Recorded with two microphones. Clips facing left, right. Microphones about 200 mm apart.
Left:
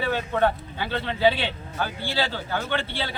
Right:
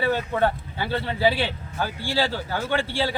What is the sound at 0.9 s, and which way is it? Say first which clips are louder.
Speech: left 1 dB; 10° right (ahead or behind).